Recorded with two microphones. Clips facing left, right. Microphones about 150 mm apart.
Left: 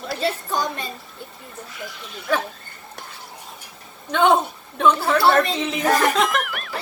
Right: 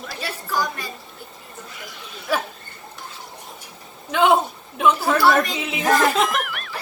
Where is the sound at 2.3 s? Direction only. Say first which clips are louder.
Left 1 dB; 5° right (ahead or behind).